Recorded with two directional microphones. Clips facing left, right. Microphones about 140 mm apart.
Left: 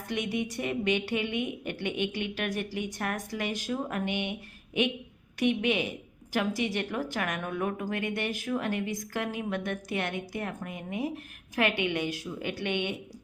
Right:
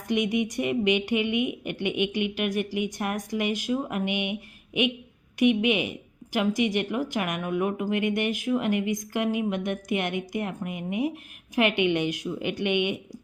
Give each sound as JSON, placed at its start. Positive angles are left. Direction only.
{"t": 0.1, "sound": "speech", "side_deg": -15}